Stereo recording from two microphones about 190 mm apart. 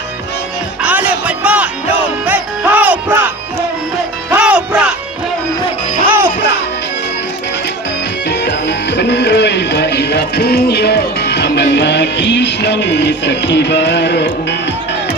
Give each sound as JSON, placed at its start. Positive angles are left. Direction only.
{"t": 0.8, "sound": "music", "side_deg": -5}
{"t": 4.4, "sound": "music", "side_deg": -5}
{"t": 6.1, "sound": "music", "side_deg": -10}
{"t": 8.3, "sound": "music", "side_deg": 65}